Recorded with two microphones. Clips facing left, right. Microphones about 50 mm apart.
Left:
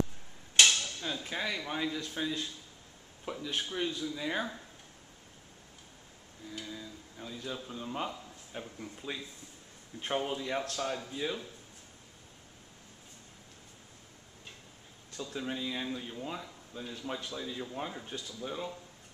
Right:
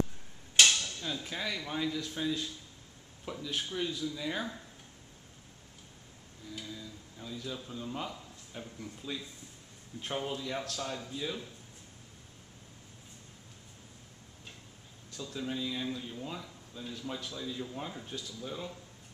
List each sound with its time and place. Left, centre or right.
0.6 s a sound: centre
1.0 s speech: centre
6.6 s a man's voice: centre
15.1 s speech: centre